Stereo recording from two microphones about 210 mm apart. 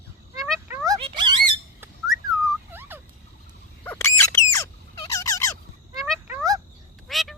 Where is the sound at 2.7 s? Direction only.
10° right (ahead or behind).